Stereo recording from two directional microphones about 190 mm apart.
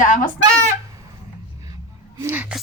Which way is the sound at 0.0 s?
40° left (ahead or behind).